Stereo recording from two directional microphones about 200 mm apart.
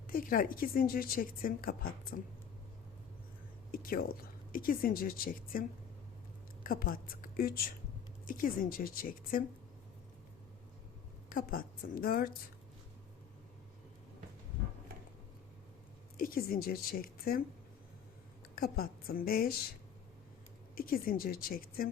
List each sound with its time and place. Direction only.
0.1 s a woman's voice: 45° left (ahead or behind)
3.7 s whispering: 45° left (ahead or behind)
4.5 s a woman's voice: 45° left (ahead or behind)
11.3 s a woman's voice: 45° left (ahead or behind)
16.1 s a woman's voice: 45° left (ahead or behind)
18.5 s a woman's voice: 45° left (ahead or behind)
20.7 s a woman's voice: 45° left (ahead or behind)